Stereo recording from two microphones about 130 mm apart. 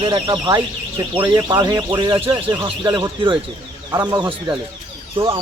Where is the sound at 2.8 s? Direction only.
35° right (ahead or behind).